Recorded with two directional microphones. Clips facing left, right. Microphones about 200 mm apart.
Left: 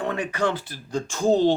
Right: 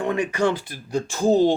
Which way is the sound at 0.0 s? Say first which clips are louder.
Right 3 dB; 15° right (ahead or behind).